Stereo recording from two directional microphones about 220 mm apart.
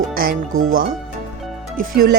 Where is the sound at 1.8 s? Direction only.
40° right (ahead or behind).